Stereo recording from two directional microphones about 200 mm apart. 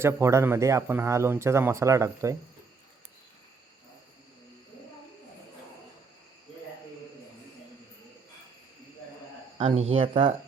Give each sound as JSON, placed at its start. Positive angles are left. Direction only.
{"t": 0.0, "sound": "speech", "side_deg": -15}
{"t": 9.6, "sound": "speech", "side_deg": -30}